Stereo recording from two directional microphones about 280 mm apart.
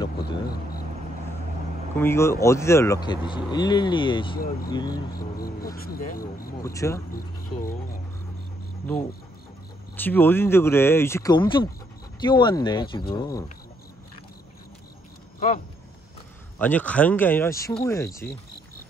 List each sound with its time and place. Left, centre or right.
2.0 s speech: centre
4.4 s speech: left
4.6 s speech: centre
5.1 s speech: left
6.6 s speech: centre
9.9 s speech: centre
16.5 s speech: centre